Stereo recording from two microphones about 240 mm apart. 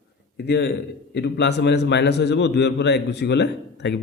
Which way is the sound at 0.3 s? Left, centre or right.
Left.